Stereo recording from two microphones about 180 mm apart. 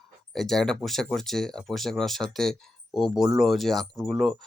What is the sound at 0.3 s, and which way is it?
Speech, centre (ahead or behind).